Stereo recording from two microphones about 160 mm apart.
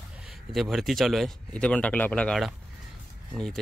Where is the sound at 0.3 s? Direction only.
Centre (ahead or behind).